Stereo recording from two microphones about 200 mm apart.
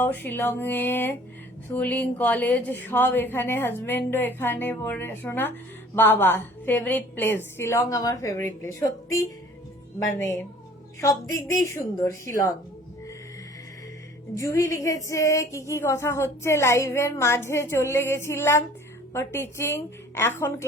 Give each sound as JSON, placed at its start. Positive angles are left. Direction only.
{"t": 0.0, "sound": "a woman's voice", "side_deg": 10}
{"t": 11.0, "sound": "a woman's voice", "side_deg": 15}
{"t": 14.3, "sound": "a woman's voice", "side_deg": 15}